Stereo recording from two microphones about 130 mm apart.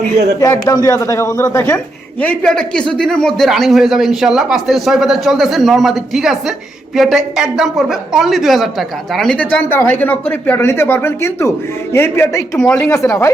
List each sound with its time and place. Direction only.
0.6 s speech: 30° left (ahead or behind)
2.2 s a man's voice: 5° left (ahead or behind)
12.5 s speech: 5° left (ahead or behind)
12.9 s speech: 20° left (ahead or behind)